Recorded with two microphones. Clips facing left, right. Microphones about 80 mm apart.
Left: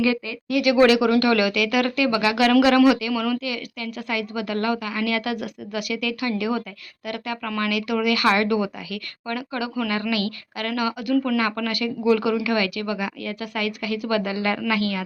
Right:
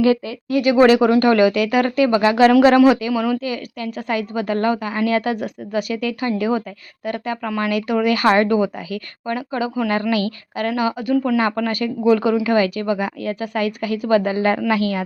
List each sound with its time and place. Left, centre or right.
0.0 s speech: right
3.1 s speech: right
3.4 s speech: right
11.4 s speech: right